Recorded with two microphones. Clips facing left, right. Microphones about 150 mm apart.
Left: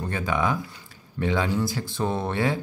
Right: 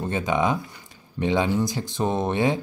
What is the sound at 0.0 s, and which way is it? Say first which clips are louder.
Speech: right 3 dB; 20° right (ahead or behind).